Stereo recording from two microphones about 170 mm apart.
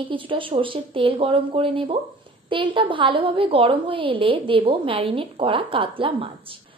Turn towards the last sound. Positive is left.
turn(degrees=-30)  # may be behind; listen again after turning